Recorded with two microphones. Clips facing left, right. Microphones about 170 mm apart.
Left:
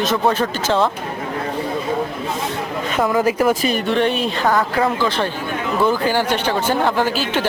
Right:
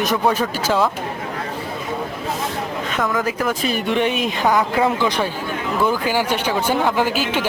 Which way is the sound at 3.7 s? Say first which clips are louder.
Left 2 dB; 10° right (ahead or behind).